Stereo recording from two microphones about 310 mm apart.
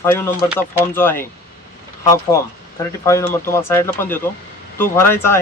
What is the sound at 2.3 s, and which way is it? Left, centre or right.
Speech, centre.